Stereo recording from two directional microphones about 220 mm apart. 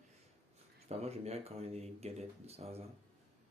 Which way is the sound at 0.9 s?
30° right (ahead or behind).